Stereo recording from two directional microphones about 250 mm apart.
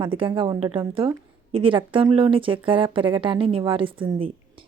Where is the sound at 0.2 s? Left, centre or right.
Centre.